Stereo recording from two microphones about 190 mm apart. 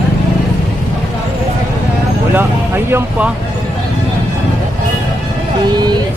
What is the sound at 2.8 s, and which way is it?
Speech, 10° right (ahead or behind).